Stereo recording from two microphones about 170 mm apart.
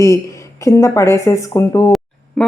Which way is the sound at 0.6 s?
15° left (ahead or behind).